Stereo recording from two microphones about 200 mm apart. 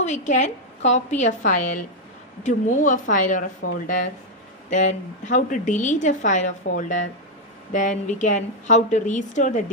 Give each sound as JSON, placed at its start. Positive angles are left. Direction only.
{"t": 0.0, "sound": "speech", "side_deg": 35}